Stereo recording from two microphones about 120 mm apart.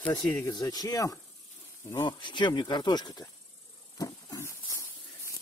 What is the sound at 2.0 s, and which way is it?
Speech, 40° left (ahead or behind).